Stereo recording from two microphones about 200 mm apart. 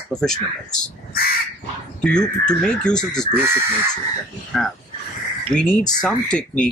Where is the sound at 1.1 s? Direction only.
50° left (ahead or behind).